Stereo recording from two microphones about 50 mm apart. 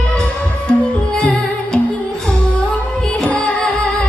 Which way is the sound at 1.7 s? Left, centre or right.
Centre.